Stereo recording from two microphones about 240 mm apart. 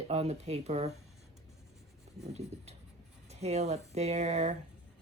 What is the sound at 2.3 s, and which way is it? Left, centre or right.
Speech, right.